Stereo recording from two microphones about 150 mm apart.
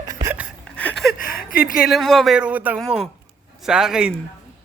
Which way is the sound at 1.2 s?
75° left (ahead or behind).